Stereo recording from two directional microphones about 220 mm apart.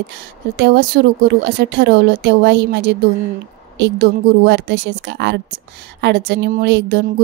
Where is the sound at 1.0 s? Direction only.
45° right (ahead or behind).